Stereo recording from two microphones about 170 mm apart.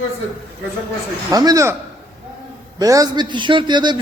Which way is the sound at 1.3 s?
20° right (ahead or behind).